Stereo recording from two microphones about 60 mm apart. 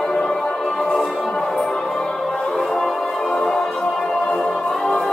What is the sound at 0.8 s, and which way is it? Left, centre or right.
Music, centre.